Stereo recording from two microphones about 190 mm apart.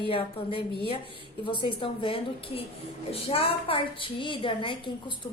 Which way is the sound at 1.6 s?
25° left (ahead or behind).